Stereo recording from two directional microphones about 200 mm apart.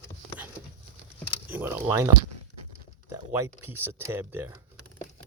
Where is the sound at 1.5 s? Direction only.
10° right (ahead or behind).